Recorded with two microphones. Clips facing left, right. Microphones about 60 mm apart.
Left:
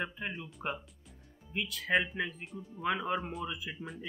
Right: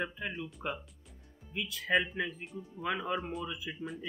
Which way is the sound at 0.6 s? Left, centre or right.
Centre.